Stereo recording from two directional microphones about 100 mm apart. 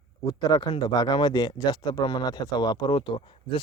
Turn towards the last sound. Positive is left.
turn(degrees=55)  # may be behind; listen again after turning